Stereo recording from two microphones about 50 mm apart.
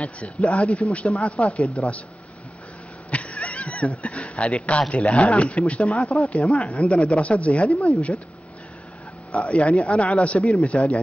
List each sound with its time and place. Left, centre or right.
0.0 s speech: left
3.1 s speech: left
7.7 s speech: centre
9.3 s speech: left